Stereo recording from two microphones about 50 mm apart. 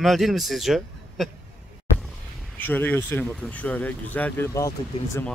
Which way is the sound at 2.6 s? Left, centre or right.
Left.